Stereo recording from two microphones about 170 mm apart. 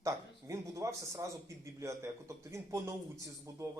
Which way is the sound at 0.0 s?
20° right (ahead or behind).